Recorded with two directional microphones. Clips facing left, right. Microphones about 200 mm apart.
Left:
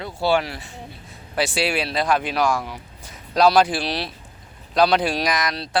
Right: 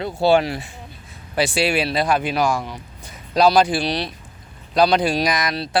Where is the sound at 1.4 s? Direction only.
Centre (ahead or behind).